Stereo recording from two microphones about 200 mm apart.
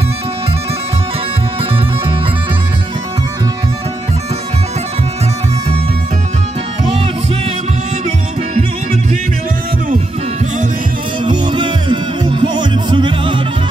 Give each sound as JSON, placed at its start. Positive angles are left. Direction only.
{"t": 11.2, "sound": "music", "side_deg": -20}